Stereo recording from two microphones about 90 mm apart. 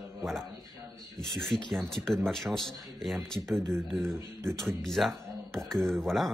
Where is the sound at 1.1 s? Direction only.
5° left (ahead or behind).